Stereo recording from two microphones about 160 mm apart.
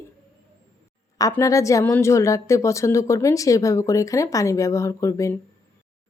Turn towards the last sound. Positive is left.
turn(degrees=20)  # may be behind; listen again after turning